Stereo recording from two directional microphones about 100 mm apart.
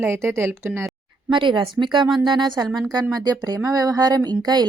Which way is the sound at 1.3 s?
55° right (ahead or behind).